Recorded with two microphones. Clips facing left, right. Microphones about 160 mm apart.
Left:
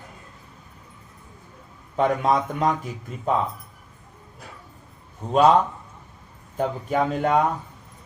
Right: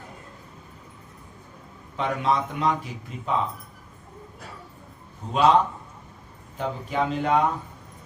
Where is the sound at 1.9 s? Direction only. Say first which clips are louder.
Left 4 dB; 45° left (ahead or behind).